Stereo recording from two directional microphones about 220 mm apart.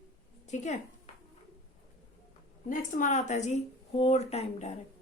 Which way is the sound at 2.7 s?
35° left (ahead or behind).